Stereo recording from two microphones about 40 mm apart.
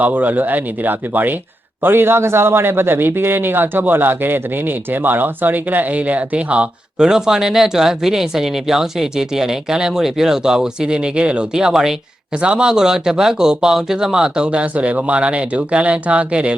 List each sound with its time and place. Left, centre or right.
0.0 s speech: right
1.8 s a man's voice: right
7.0 s speech: centre
11.5 s speech: centre
12.3 s speech: right
14.6 s speech: right